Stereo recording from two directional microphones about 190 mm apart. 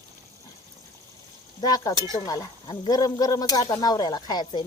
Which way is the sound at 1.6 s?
20° left (ahead or behind).